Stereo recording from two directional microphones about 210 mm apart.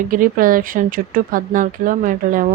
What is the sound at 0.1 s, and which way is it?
Speech, 40° right (ahead or behind).